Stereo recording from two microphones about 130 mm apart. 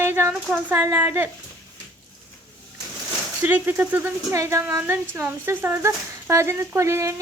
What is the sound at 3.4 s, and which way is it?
Speech, 15° right (ahead or behind).